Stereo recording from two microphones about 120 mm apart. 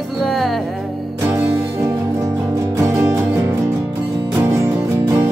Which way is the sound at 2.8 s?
20° right (ahead or behind).